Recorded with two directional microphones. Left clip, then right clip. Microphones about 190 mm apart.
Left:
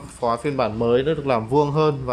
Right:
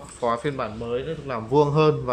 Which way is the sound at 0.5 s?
20° left (ahead or behind).